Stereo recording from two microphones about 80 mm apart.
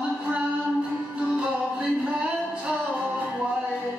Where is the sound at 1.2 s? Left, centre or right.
Centre.